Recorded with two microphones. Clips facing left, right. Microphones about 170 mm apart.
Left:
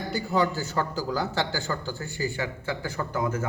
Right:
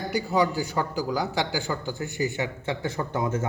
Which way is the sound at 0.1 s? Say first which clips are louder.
Right 1 dB; 15° right (ahead or behind).